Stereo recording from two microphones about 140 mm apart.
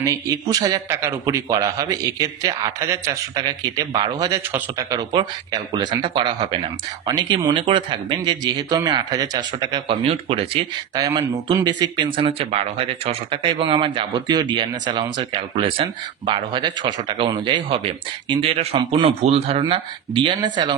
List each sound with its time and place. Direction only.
0.0 s a man's voice: 25° right (ahead or behind); by 10.7 s 40° right (ahead or behind)
11.0 s speech: 30° right (ahead or behind)